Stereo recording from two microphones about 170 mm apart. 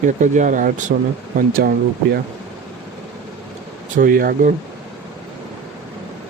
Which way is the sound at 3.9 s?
55° right (ahead or behind).